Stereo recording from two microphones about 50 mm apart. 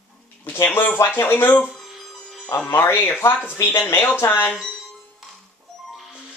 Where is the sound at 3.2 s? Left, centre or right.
Left.